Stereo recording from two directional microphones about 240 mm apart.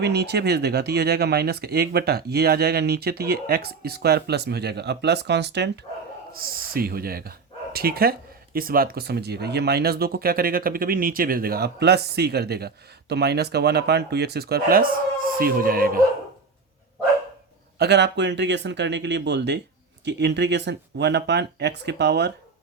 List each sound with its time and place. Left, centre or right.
0.0 s speech: right
17.7 s speech: right